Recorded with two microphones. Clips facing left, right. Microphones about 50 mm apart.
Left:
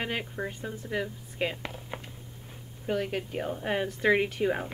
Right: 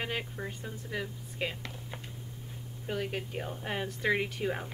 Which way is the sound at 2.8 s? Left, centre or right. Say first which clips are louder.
Left 5 dB; centre.